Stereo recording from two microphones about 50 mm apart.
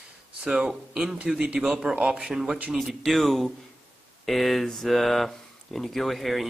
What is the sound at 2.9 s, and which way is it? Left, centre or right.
Speech, centre.